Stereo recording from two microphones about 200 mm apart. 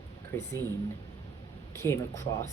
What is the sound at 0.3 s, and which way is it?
Speech, 10° left (ahead or behind).